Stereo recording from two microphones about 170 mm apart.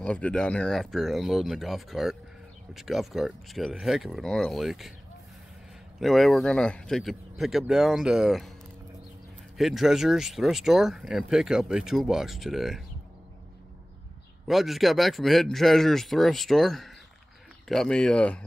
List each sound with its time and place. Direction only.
0.0 s speech: 5° left (ahead or behind)
5.9 s speech: centre (ahead or behind)
9.6 s speech: centre (ahead or behind)
14.5 s speech: centre (ahead or behind)